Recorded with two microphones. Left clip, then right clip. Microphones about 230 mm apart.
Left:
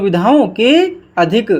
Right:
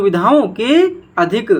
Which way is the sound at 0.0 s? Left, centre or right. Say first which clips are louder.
Even; left.